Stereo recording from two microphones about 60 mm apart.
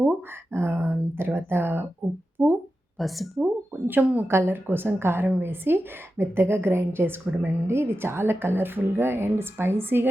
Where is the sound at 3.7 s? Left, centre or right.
Right.